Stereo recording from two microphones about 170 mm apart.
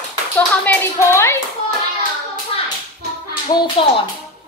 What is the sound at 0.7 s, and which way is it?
Clapping, 15° left (ahead or behind).